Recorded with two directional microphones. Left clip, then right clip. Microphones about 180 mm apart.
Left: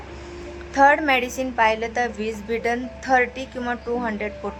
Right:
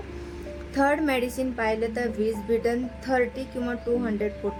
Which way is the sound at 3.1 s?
15° right (ahead or behind).